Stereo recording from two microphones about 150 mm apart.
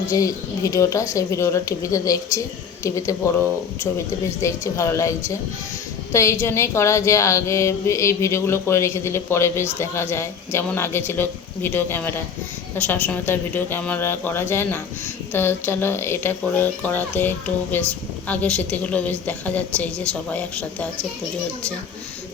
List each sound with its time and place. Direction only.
0.1 s speech: 20° left (ahead or behind)
4.4 s a woman's voice: 20° left (ahead or behind)